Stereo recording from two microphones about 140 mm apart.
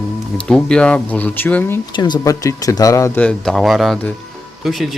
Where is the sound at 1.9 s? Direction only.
30° left (ahead or behind).